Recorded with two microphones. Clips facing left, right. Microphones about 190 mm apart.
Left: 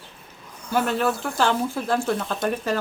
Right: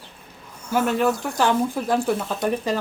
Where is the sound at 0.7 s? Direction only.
10° right (ahead or behind).